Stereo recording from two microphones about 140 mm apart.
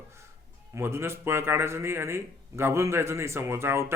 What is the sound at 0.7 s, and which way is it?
A man's voice, 20° right (ahead or behind).